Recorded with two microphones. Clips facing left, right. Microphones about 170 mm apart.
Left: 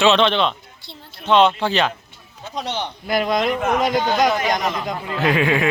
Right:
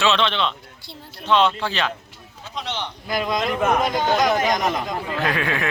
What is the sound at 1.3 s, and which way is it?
Speech, 30° left (ahead or behind).